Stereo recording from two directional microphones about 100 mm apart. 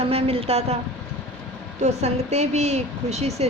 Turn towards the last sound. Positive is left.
turn(degrees=-90)